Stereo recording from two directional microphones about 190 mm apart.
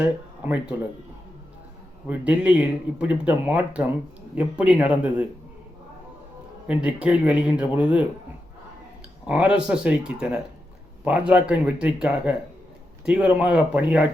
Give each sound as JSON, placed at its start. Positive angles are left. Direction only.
{"t": 0.0, "sound": "speech", "side_deg": -10}
{"t": 2.0, "sound": "speech", "side_deg": -5}
{"t": 6.7, "sound": "speech", "side_deg": -5}
{"t": 9.2, "sound": "speech", "side_deg": -5}